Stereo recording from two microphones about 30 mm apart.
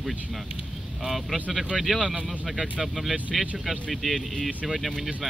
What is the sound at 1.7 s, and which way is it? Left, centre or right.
Speech, centre.